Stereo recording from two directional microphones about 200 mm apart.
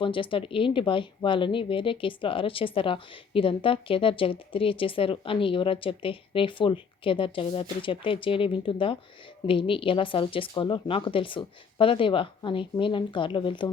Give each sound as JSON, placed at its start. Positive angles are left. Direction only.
{"t": 0.0, "sound": "speech", "side_deg": 25}